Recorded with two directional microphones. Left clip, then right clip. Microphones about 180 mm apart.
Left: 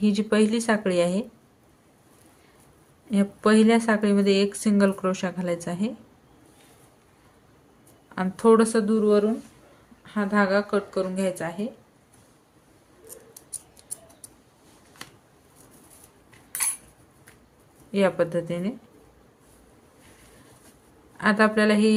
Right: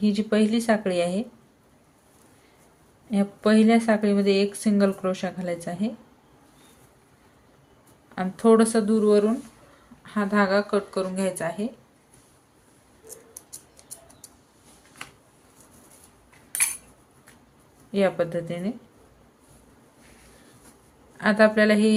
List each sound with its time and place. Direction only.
0.0 s speech: 20° left (ahead or behind)
3.1 s speech: 20° left (ahead or behind)
8.1 s speech: 15° left (ahead or behind)
13.5 s rodents: 15° left (ahead or behind)
17.9 s speech: 15° left (ahead or behind)
21.2 s speech: 10° left (ahead or behind)